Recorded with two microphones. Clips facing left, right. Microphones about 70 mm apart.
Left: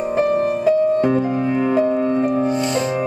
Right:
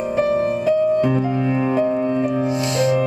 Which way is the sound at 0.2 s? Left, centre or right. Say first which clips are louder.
Left 1 dB; centre.